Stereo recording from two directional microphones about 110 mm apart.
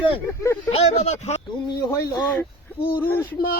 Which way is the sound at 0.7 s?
75° left (ahead or behind).